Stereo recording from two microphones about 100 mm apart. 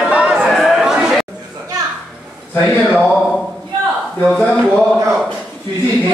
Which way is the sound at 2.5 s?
15° left (ahead or behind).